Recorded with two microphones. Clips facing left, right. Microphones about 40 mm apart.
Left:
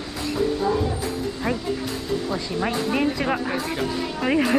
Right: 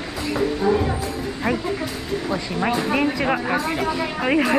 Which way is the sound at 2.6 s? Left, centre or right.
Right.